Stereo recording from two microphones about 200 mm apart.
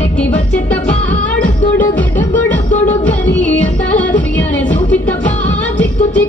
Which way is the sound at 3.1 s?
10° left (ahead or behind).